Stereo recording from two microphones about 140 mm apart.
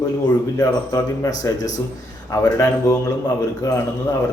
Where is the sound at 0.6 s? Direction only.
25° left (ahead or behind).